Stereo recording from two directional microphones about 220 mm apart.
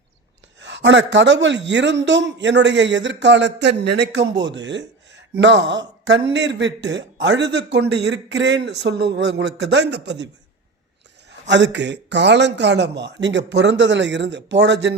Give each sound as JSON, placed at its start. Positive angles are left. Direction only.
{"t": 0.6, "sound": "a man's voice", "side_deg": -55}
{"t": 11.3, "sound": "a man's voice", "side_deg": -55}